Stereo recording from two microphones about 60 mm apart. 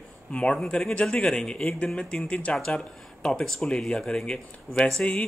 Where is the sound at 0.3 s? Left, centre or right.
Centre.